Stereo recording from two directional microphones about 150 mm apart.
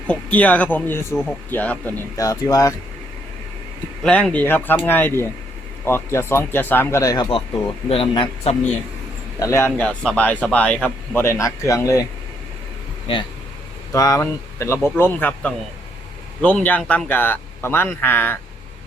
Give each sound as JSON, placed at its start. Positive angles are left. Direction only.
{"t": 0.1, "sound": "a man's voice", "side_deg": 10}
{"t": 2.1, "sound": "speech", "side_deg": 25}
{"t": 4.0, "sound": "a man's voice", "side_deg": 10}
{"t": 7.9, "sound": "a man's voice", "side_deg": 40}
{"t": 9.4, "sound": "a man's voice", "side_deg": 20}
{"t": 13.9, "sound": "a man's voice", "side_deg": 20}